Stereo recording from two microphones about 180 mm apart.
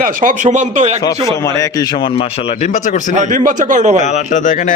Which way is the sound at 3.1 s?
45° right (ahead or behind).